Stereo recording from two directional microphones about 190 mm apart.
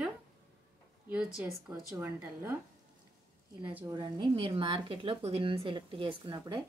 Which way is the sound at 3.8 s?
20° right (ahead or behind).